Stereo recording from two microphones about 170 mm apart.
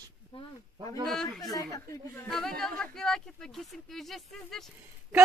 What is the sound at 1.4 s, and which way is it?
Speech, 20° left (ahead or behind).